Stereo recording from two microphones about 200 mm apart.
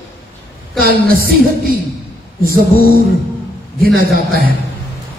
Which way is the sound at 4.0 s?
45° right (ahead or behind).